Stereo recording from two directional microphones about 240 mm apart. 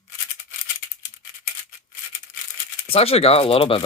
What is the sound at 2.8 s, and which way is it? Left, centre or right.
Speech, left.